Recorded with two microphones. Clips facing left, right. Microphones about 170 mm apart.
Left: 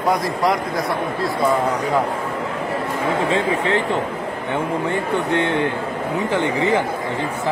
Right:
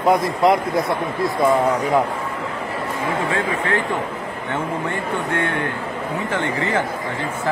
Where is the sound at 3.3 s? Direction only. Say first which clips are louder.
Left 3 dB; 20° left (ahead or behind).